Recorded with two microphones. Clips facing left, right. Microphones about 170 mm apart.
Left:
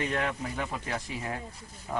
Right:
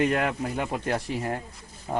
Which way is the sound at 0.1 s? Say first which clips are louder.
Right 5 dB; 55° right (ahead or behind).